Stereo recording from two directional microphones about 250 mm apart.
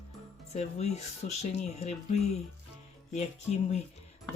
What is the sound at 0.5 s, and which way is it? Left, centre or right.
Speech, left.